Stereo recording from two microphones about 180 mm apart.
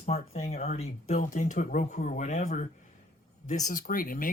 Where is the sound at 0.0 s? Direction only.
40° left (ahead or behind).